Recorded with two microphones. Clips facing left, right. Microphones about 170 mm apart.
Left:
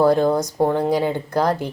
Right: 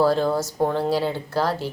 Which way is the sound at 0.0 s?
15° left (ahead or behind).